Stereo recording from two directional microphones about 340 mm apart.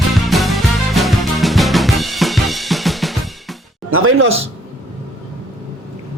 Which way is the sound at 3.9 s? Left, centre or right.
Right.